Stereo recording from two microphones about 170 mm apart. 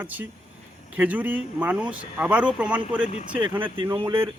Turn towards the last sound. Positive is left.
turn(degrees=-15)  # may be behind; listen again after turning